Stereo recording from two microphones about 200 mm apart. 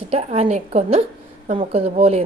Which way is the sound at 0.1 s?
30° right (ahead or behind).